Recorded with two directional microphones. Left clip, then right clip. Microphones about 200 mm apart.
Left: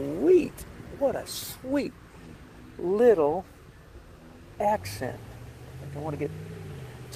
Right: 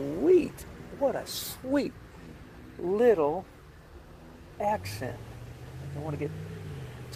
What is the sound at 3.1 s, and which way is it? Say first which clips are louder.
Speech: left 3 dB; 25° left (ahead or behind).